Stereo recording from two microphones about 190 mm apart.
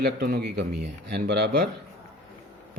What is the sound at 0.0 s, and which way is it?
Speech, 55° right (ahead or behind).